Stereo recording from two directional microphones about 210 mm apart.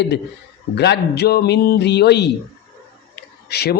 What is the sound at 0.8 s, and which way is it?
A man's voice, 50° left (ahead or behind).